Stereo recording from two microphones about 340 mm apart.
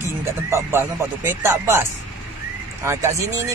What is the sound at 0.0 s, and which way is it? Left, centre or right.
Speech, centre.